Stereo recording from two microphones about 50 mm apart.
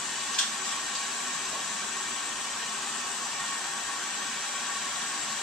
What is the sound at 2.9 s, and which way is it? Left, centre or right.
Hair dryer, centre.